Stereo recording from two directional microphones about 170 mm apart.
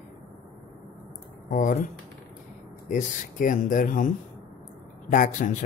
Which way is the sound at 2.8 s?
50° left (ahead or behind).